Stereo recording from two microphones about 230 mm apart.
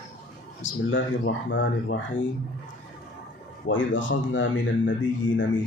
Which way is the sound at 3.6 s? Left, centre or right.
Left.